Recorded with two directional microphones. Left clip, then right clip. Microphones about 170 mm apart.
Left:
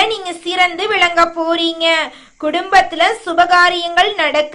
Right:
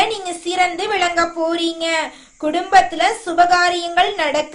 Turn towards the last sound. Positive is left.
turn(degrees=20)  # may be behind; listen again after turning